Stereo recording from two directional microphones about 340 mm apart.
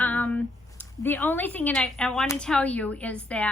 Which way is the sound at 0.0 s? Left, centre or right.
Centre.